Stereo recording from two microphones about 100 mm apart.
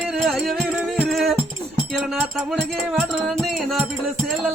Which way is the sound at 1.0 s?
Centre (ahead or behind).